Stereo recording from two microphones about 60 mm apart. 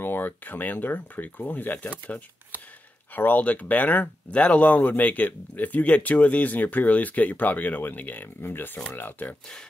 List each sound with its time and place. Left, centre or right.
0.0 s speech: left